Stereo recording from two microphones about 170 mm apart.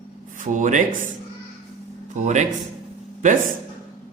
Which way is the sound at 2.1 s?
45° right (ahead or behind).